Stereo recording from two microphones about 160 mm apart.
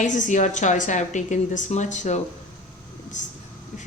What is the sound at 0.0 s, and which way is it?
A woman's voice, 50° left (ahead or behind).